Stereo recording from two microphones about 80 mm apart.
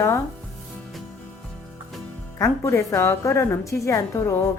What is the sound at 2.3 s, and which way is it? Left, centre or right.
A woman's voice, left.